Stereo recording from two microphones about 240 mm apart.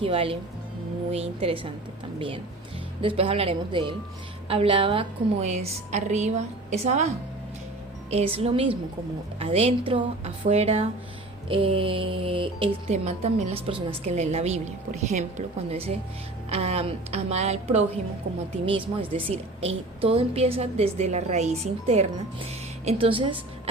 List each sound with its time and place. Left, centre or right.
0.0 s speech: right
8.1 s speech: right
19.1 s speech: right